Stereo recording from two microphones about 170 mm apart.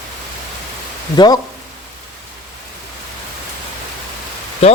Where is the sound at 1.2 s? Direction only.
25° left (ahead or behind).